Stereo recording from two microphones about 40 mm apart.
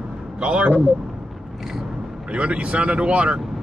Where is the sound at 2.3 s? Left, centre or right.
Right.